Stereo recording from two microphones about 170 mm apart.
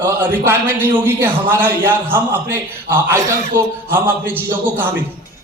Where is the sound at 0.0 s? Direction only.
10° right (ahead or behind).